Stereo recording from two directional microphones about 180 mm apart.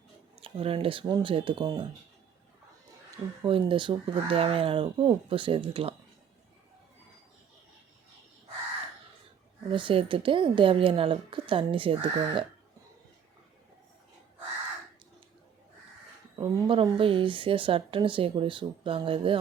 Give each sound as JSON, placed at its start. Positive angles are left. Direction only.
{"t": 0.3, "sound": "speech", "side_deg": -30}
{"t": 3.4, "sound": "speech", "side_deg": -30}
{"t": 9.6, "sound": "speech", "side_deg": -25}
{"t": 16.4, "sound": "speech", "side_deg": -25}